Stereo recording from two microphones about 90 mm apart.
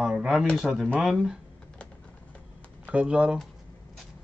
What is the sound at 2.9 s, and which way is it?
Speech, 10° right (ahead or behind).